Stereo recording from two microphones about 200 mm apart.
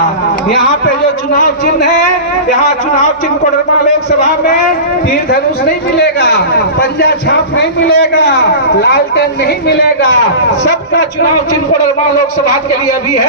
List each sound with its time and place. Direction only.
1.3 s speech: 45° left (ahead or behind)
6.0 s a man's voice: 55° left (ahead or behind)